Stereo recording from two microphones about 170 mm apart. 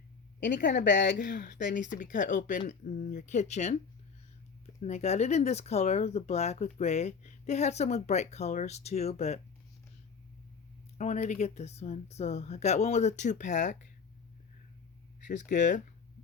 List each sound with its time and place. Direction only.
0.3 s a woman's voice: 90° left
0.6 s speech: 50° left (ahead or behind)
10.9 s speech: 40° left (ahead or behind)
15.3 s speech: 45° left (ahead or behind)